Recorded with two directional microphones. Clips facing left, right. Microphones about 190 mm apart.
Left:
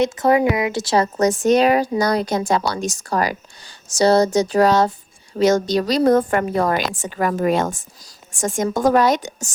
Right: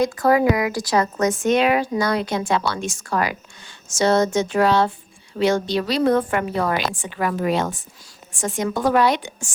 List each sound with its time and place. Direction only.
0.0 s a woman's voice: 20° left (ahead or behind); by 9.5 s 45° left (ahead or behind)